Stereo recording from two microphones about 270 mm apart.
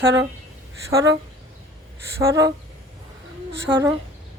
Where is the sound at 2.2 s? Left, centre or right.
Centre.